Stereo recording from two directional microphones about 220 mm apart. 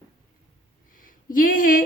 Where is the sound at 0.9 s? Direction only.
40° left (ahead or behind).